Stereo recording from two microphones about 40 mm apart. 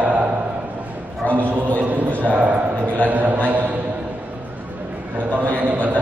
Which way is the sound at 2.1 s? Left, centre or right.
Right.